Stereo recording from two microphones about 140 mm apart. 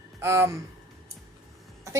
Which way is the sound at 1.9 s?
20° right (ahead or behind).